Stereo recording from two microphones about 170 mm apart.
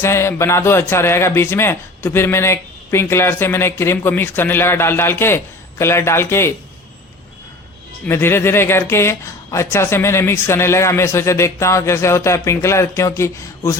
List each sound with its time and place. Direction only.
0.0 s speech: 15° left (ahead or behind)
8.0 s speech: 15° left (ahead or behind)